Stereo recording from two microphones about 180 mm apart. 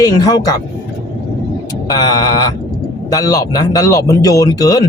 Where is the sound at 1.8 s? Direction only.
20° left (ahead or behind).